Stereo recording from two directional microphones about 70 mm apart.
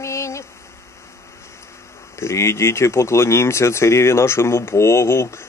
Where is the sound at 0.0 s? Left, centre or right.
Left.